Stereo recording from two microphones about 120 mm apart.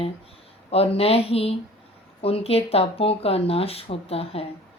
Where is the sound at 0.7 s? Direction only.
55° left (ahead or behind).